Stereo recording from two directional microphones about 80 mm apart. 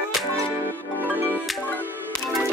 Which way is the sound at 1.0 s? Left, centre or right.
Right.